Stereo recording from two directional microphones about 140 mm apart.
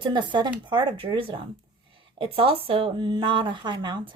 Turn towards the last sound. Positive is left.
turn(degrees=-30)  # may be behind; listen again after turning